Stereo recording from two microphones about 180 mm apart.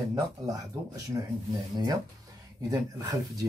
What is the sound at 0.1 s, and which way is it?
Speech, 20° right (ahead or behind).